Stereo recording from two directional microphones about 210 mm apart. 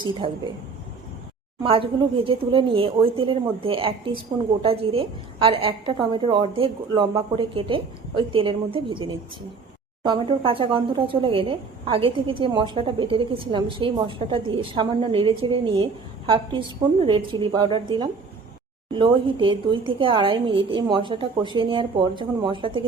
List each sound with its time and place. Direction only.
0.0 s speech: 25° right (ahead or behind)
1.6 s speech: 25° right (ahead or behind)